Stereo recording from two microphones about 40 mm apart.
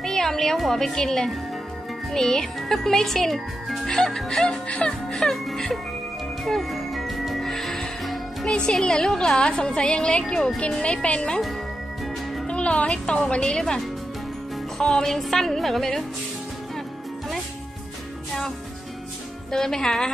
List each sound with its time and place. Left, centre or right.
0.0 s music: centre
0.6 s a woman's voice: centre
3.8 s a child's voice: centre
6.4 s music: centre
8.7 s a child's voice: centre
10.2 s a child's voice: centre
10.8 s a woman's voice: left
12.4 s a woman's voice: left
14.8 s a child's voice: centre
19.5 s a child's voice: centre